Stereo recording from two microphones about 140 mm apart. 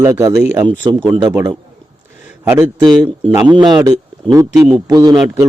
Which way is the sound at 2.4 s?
15° right (ahead or behind).